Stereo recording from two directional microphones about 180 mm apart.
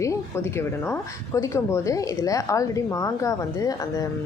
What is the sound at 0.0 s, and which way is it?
Speech, 15° left (ahead or behind).